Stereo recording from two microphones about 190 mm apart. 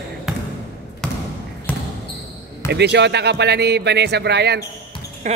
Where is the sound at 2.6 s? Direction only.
60° right (ahead or behind).